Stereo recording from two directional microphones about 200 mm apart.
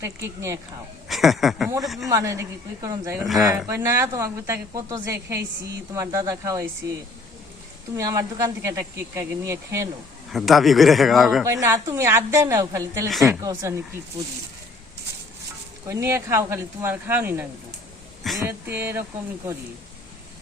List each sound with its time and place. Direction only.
0.0 s speech: 15° right (ahead or behind)
1.0 s speech: centre (ahead or behind)
2.0 s speech: 15° right (ahead or behind)
7.9 s speech: 15° right (ahead or behind)
10.3 s speech: centre (ahead or behind)
11.4 s speech: 15° right (ahead or behind)
13.1 s speech: centre (ahead or behind)
13.4 s speech: 15° right (ahead or behind)
15.9 s speech: 15° right (ahead or behind)